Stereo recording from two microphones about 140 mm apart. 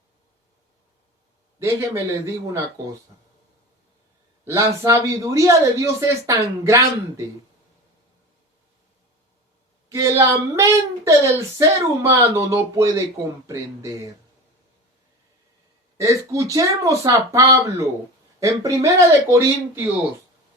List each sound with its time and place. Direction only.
1.5 s speech: 20° right (ahead or behind)
4.4 s speech: 20° right (ahead or behind)
9.9 s speech: 20° right (ahead or behind)
16.0 s speech: 25° right (ahead or behind)